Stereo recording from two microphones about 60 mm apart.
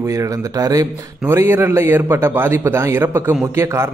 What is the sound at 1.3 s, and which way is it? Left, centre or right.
A man's voice, right.